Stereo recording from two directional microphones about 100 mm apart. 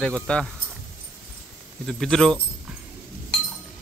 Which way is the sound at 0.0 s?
10° left (ahead or behind).